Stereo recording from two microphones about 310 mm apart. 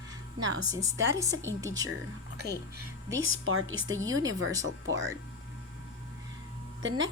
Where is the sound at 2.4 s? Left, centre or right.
Right.